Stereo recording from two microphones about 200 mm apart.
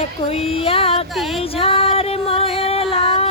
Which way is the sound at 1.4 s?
30° left (ahead or behind).